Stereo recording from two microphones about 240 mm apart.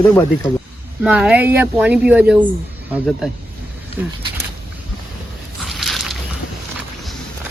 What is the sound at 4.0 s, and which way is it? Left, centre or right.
Speech, centre.